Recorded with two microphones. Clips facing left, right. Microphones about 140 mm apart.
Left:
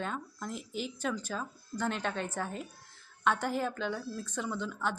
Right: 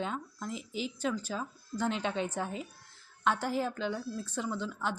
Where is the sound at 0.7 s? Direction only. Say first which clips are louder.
Right 1 dB; 50° left (ahead or behind).